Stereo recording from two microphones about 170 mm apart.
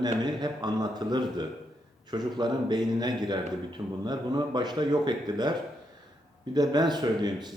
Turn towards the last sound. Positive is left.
turn(degrees=-25)  # may be behind; listen again after turning